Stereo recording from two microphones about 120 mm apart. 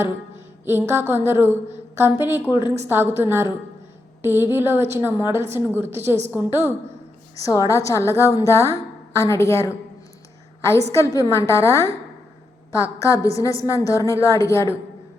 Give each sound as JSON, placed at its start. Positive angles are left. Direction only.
{"t": 0.6, "sound": "speech", "side_deg": -20}
{"t": 7.3, "sound": "a woman's voice", "side_deg": 30}